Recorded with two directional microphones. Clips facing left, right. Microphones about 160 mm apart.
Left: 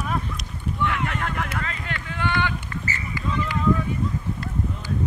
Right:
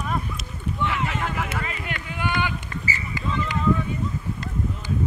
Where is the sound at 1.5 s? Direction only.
10° right (ahead or behind).